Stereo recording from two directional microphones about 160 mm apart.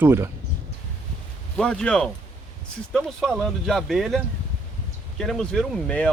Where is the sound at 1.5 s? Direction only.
5° left (ahead or behind).